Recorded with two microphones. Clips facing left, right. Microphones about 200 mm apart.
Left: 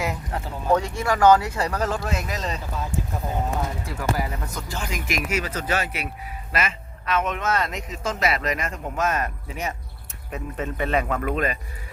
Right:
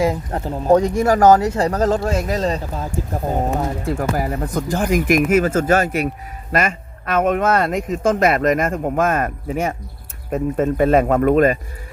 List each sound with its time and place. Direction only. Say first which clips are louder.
0.3 s speech: right 4 dB; 40° right (ahead or behind)
3.2 s speech: right 7 dB; 45° right (ahead or behind)